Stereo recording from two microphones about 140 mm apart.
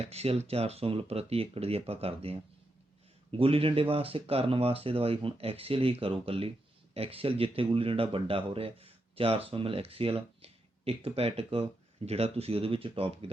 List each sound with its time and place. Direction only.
0.0 s speech: 45° right (ahead or behind)